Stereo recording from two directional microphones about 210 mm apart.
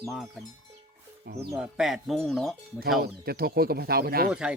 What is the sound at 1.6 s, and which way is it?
Speech, centre (ahead or behind).